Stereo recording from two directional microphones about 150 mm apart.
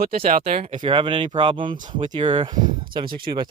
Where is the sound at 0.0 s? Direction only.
75° right (ahead or behind).